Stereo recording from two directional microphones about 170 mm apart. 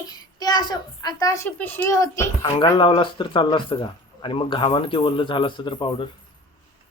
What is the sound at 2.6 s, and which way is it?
Speech, 30° left (ahead or behind).